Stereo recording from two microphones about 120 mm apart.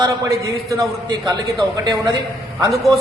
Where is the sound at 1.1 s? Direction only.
40° right (ahead or behind).